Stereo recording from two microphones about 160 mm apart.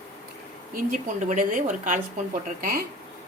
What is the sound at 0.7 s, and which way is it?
Speech, 55° right (ahead or behind).